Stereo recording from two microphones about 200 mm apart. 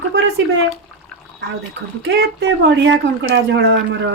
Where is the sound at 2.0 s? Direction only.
65° right (ahead or behind).